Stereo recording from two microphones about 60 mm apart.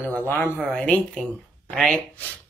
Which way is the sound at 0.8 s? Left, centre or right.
Centre.